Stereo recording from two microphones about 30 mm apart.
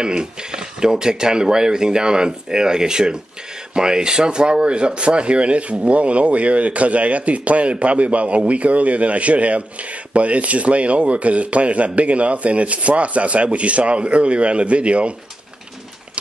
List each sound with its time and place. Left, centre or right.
0.0 s speech: right